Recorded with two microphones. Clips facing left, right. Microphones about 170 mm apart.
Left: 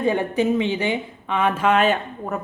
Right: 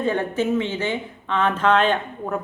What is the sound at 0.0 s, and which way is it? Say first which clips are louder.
A woman's voice: left 2 dB; 15° left (ahead or behind).